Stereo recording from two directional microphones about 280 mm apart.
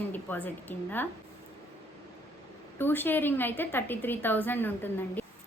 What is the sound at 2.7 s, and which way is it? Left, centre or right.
A woman's voice, centre.